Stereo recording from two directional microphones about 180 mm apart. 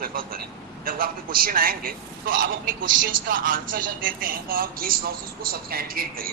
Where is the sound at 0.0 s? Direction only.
55° right (ahead or behind).